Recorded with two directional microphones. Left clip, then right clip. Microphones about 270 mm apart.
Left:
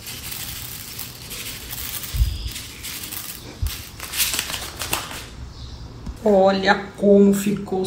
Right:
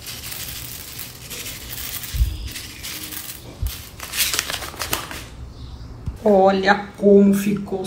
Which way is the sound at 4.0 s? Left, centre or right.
Centre.